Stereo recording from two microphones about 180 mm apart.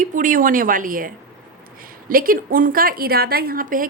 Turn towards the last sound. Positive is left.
turn(degrees=-50)  # may be behind; listen again after turning